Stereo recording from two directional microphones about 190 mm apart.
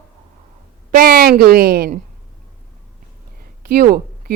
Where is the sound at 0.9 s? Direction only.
50° right (ahead or behind).